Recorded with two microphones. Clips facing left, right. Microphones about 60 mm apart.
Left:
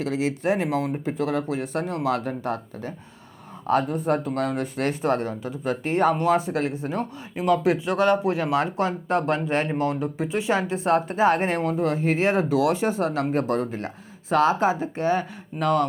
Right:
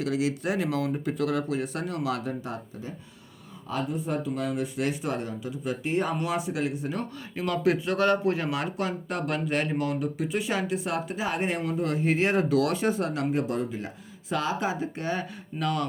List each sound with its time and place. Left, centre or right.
0.0 s speech: left
14.3 s speech: left